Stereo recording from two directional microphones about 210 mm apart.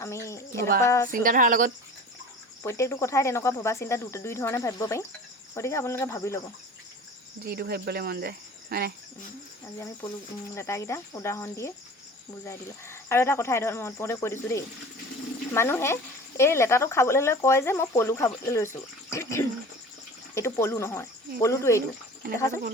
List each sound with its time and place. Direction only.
0.0 s bird: 15° left (ahead or behind)
0.8 s speech: 15° left (ahead or behind)
1.1 s speech: 40° right (ahead or behind)
2.6 s speech: 15° left (ahead or behind)
7.4 s speech: 50° right (ahead or behind)
9.7 s speech: 15° left (ahead or behind)